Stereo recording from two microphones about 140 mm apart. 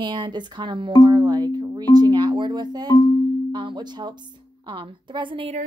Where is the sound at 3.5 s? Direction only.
35° right (ahead or behind).